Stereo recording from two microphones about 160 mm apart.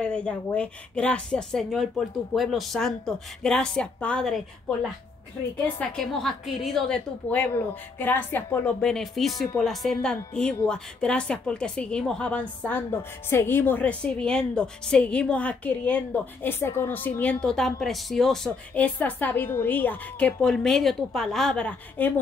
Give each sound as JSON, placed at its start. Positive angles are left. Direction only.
{"t": 0.0, "sound": "a woman's voice", "side_deg": 5}
{"t": 5.8, "sound": "a woman's voice", "side_deg": 5}